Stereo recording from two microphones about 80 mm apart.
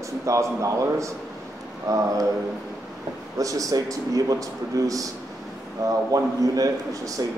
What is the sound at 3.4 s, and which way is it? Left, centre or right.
A man's voice, right.